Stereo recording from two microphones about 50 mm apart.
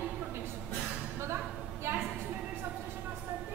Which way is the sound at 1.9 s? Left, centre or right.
Right.